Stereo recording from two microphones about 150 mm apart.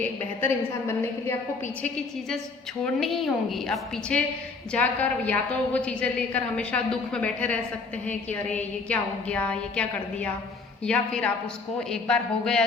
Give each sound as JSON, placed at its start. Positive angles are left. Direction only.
{"t": 0.0, "sound": "a woman's voice", "side_deg": 15}
{"t": 2.8, "sound": "a woman's voice", "side_deg": 0}